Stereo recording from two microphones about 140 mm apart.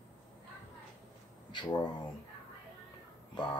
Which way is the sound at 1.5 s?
35° left (ahead or behind).